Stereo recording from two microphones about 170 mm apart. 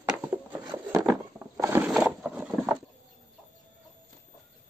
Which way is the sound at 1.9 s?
Centre (ahead or behind).